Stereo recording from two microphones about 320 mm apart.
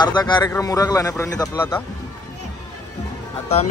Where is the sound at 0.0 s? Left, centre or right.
Centre.